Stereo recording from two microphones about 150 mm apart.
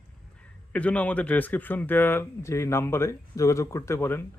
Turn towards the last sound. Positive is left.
turn(degrees=15)  # may be behind; listen again after turning